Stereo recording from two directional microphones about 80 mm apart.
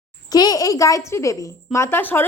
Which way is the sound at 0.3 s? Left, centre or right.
Left.